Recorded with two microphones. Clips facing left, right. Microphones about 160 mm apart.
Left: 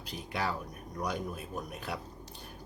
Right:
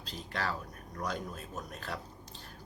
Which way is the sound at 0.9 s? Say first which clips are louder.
Left 2 dB; 10° left (ahead or behind).